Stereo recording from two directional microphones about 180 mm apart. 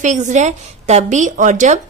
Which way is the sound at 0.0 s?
45° right (ahead or behind).